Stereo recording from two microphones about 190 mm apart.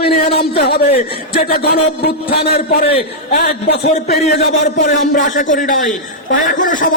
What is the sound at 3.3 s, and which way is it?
Speech, 60° left (ahead or behind).